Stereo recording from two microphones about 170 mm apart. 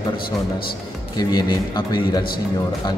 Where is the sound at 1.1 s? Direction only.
25° left (ahead or behind).